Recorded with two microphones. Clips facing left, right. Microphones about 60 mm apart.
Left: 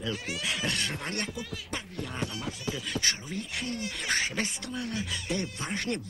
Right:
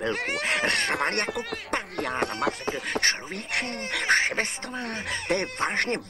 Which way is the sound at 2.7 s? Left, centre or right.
Right.